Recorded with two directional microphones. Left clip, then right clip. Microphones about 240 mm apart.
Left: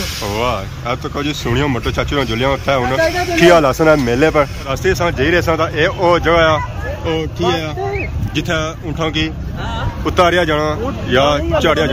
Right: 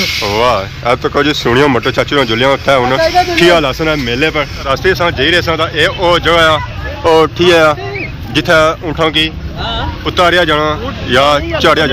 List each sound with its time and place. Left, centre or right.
0.2 s speech: centre
4.6 s speech: centre